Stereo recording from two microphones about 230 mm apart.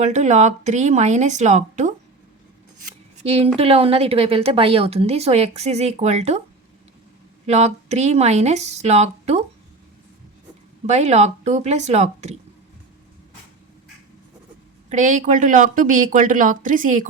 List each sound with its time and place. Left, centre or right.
0.0 s speech: right
3.2 s speech: right
7.4 s speech: right
10.8 s speech: right
14.8 s speech: right